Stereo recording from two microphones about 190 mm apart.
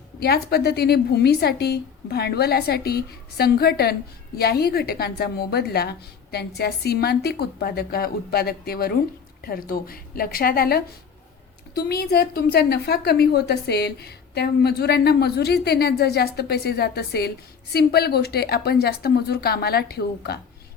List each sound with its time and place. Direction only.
0.2 s a woman's voice: 55° left (ahead or behind)